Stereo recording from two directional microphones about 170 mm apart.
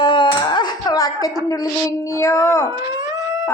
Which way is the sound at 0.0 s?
30° left (ahead or behind).